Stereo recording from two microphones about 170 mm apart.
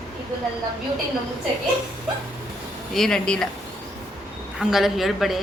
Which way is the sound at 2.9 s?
5° left (ahead or behind).